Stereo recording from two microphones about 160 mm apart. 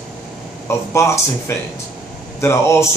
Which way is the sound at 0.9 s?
15° left (ahead or behind).